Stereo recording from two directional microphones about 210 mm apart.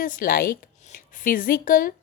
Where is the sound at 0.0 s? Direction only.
45° left (ahead or behind).